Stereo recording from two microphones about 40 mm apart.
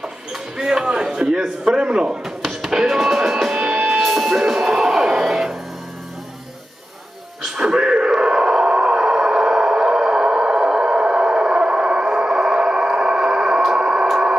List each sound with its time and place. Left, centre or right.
0.0 s a sound: centre
2.2 s music: centre
3.5 s music: right
4.0 s music: centre
7.4 s a sound: centre
13.7 s music: centre